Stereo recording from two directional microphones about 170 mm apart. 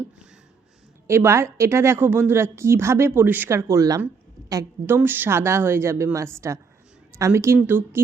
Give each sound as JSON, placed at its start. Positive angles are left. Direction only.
{"t": 1.0, "sound": "a woman's voice", "side_deg": -15}